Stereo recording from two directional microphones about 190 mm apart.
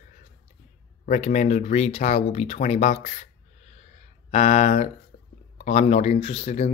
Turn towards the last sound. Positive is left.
turn(degrees=35)  # may be behind; listen again after turning